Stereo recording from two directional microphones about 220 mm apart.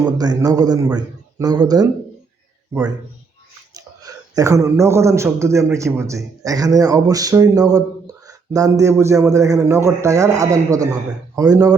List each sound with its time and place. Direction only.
0.2 s speech: 15° right (ahead or behind)
3.8 s speech: 15° right (ahead or behind)